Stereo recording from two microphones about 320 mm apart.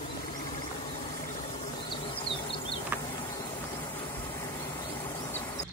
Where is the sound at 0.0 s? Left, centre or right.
Left.